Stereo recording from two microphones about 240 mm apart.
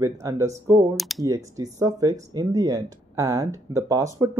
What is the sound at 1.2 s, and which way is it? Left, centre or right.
Speech, centre.